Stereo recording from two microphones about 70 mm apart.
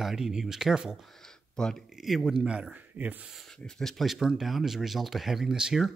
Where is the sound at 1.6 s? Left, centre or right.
Centre.